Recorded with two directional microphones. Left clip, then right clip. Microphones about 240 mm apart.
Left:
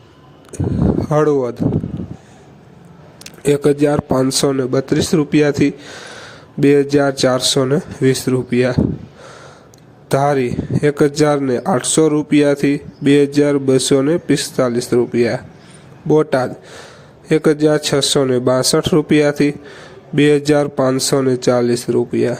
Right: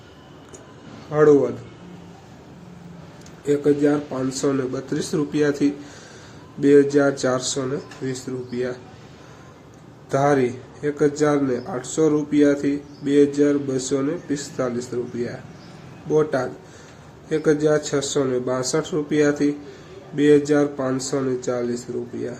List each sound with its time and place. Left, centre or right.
1.1 s speech: left
3.2 s speech: left
10.1 s speech: left